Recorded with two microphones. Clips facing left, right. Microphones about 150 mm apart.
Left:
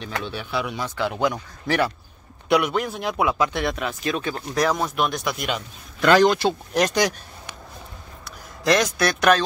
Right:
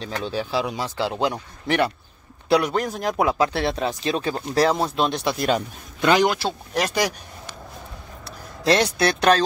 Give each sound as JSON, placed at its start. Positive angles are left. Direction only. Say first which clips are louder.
{"t": 0.0, "sound": "speech", "louder": "right 3 dB", "side_deg": -35}
{"t": 2.5, "sound": "speech", "louder": "right 1 dB", "side_deg": -40}
{"t": 6.0, "sound": "speech", "louder": "left 2 dB", "side_deg": -15}
{"t": 6.3, "sound": "speech", "louder": "left 3 dB", "side_deg": -5}
{"t": 8.6, "sound": "speech", "louder": "right 1 dB", "side_deg": -30}